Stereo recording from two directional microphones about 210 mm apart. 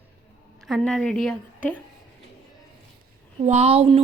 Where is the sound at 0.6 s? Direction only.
Centre (ahead or behind).